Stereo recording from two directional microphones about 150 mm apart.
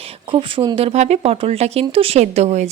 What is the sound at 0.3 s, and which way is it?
Speech, 35° right (ahead or behind).